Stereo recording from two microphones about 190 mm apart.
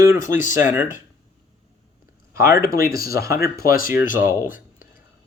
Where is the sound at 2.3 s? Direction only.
15° right (ahead or behind).